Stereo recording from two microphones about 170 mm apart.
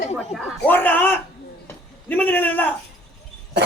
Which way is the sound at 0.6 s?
10° left (ahead or behind).